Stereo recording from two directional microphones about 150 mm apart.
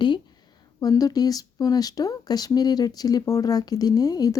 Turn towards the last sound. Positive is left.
turn(degrees=25)  # may be behind; listen again after turning